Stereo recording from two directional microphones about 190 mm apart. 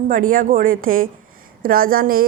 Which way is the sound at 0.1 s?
45° right (ahead or behind).